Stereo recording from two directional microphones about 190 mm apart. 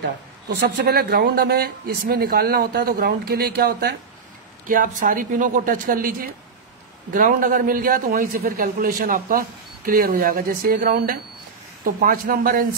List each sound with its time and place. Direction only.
0.6 s a man's voice: 55° right (ahead or behind)